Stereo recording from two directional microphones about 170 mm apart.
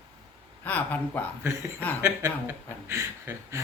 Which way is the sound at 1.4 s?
15° right (ahead or behind).